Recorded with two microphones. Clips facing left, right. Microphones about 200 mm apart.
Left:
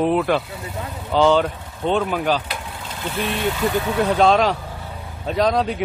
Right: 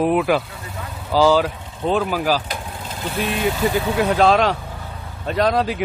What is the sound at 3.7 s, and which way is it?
A man's voice, 5° right (ahead or behind).